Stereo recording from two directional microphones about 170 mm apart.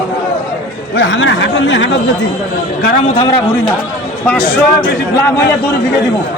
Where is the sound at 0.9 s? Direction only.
90° left.